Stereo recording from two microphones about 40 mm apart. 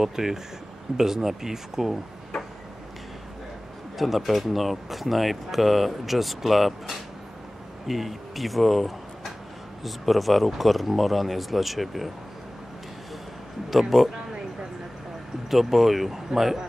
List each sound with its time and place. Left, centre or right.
0.0 s speech: centre
4.0 s speech: centre
13.7 s speech: centre
14.1 s a sound: right
15.5 s speech: centre